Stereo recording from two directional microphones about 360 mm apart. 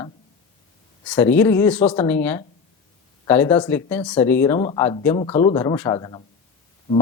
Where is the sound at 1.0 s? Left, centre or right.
Centre.